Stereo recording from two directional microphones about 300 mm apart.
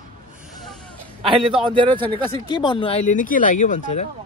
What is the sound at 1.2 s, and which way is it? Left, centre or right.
Speech, centre.